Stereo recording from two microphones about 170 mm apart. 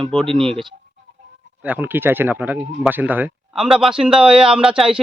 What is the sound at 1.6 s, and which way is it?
A man's voice, 10° right (ahead or behind).